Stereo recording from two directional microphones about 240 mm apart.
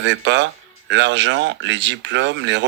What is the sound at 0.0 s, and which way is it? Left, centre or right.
Speech, right.